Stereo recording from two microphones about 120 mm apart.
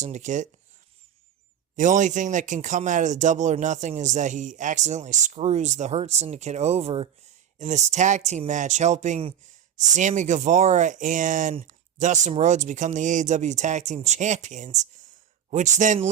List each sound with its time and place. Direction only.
0.0 s speech: 90° right
1.7 s speech: 90° right; by 7.1 s 55° right (ahead or behind)
7.6 s speech: 75° right (ahead or behind)
9.7 s speech: 90° right